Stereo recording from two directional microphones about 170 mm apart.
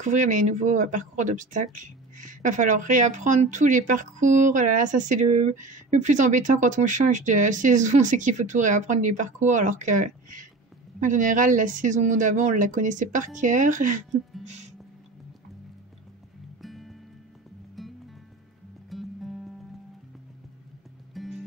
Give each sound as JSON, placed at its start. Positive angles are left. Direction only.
{"t": 0.0, "sound": "speech", "side_deg": -45}
{"t": 16.6, "sound": "music", "side_deg": 0}
{"t": 21.1, "sound": "music", "side_deg": 0}